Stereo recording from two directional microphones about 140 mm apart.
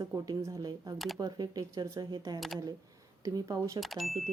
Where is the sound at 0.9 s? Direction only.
Centre (ahead or behind).